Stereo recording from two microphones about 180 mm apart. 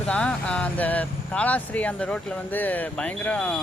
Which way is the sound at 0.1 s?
5° left (ahead or behind).